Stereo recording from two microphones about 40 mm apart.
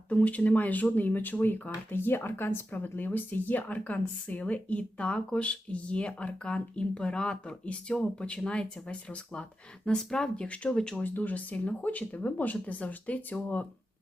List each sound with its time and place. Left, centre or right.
0.1 s speech: left
1.9 s speech: left
3.0 s speech: left; by 10.2 s centre
10.3 s speech: left
10.9 s speech: left